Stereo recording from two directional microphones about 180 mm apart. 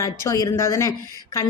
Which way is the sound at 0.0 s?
15° left (ahead or behind).